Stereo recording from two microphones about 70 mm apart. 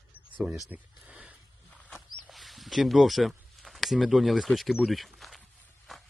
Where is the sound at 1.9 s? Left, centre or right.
Centre.